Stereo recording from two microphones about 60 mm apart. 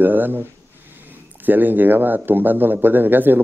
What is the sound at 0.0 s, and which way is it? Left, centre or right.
Speech, right.